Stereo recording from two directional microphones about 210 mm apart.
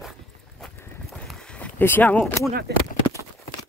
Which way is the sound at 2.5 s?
50° right (ahead or behind).